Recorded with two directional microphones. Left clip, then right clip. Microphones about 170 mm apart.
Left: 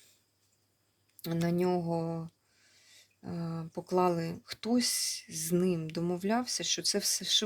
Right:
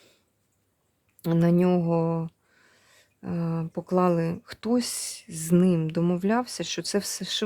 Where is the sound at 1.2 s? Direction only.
40° right (ahead or behind).